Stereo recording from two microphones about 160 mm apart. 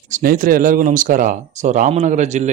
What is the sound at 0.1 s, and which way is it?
Speech, 60° right (ahead or behind).